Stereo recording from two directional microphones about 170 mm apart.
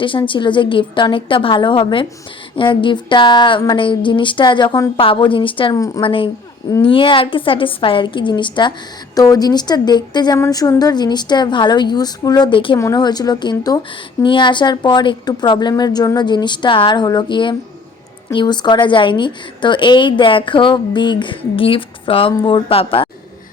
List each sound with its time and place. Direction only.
0.0 s a woman's voice: 30° left (ahead or behind)